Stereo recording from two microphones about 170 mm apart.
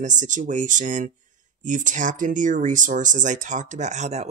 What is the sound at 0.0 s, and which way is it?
Speech, 45° right (ahead or behind).